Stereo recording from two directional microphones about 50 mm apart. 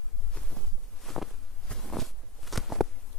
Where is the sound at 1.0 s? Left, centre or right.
Centre.